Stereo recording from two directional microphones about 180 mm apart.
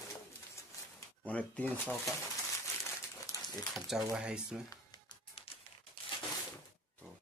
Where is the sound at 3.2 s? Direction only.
20° left (ahead or behind).